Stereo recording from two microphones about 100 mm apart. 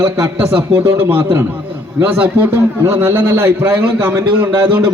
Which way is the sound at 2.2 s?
20° right (ahead or behind).